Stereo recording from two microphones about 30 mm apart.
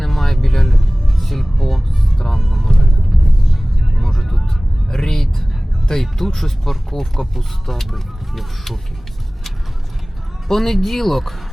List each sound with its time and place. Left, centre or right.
0.0 s music: centre
2.4 s vehicle: centre
4.0 s vehicle: centre
5.9 s speech: centre
10.5 s speech: centre